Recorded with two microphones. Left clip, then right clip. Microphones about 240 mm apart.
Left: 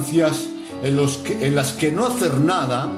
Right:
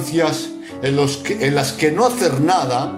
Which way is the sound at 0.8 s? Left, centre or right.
Right.